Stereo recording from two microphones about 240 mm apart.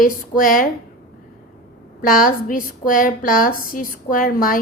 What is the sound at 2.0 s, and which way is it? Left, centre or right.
A woman's voice, left.